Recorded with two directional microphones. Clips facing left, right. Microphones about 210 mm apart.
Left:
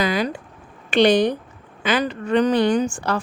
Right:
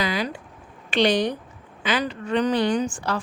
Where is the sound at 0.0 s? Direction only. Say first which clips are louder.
Left 4 dB; 50° left (ahead or behind).